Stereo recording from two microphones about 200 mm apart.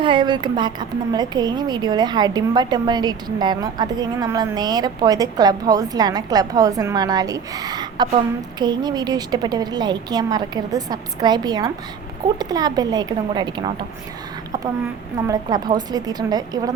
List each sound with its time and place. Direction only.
0.0 s a woman's voice: 25° right (ahead or behind)
15.3 s a woman's voice: 20° right (ahead or behind)